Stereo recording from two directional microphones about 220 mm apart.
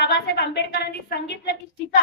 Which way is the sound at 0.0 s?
50° left (ahead or behind).